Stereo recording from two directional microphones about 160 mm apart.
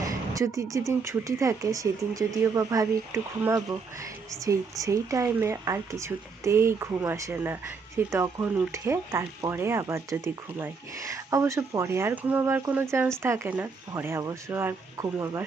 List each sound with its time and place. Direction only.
0.0 s speech: 20° right (ahead or behind)